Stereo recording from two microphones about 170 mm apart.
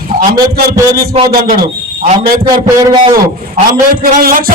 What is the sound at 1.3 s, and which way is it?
A man's voice, 60° right (ahead or behind).